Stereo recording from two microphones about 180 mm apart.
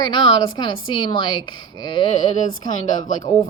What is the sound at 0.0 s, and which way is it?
A woman's voice, 25° left (ahead or behind).